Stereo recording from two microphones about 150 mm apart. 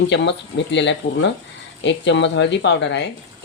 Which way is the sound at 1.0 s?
50° left (ahead or behind).